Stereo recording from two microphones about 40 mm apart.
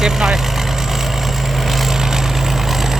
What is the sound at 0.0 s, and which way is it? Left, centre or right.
Vehicle, centre.